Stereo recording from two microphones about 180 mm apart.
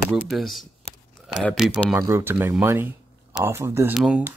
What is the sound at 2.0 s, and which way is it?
Speech, 15° right (ahead or behind).